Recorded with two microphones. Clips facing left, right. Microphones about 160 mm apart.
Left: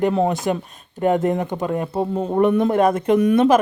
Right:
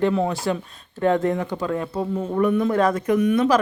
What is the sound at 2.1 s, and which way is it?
Speech, 35° left (ahead or behind).